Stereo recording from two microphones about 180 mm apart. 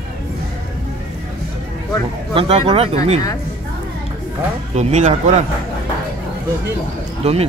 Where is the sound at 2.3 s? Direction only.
35° right (ahead or behind).